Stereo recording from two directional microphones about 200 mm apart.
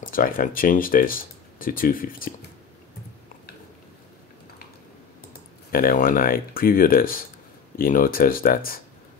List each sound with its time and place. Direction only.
0.0 s speech: 45° left (ahead or behind)
5.7 s speech: 45° left (ahead or behind)